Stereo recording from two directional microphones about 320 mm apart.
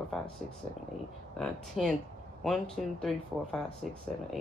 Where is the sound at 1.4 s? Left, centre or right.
Centre.